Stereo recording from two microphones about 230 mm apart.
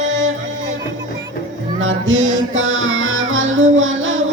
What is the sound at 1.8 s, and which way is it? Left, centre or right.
Music, right.